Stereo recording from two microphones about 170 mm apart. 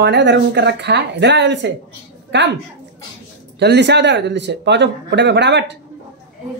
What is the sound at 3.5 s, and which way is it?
Speech, 85° right.